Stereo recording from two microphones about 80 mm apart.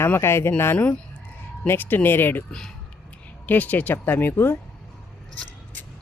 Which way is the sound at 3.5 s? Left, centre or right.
Left.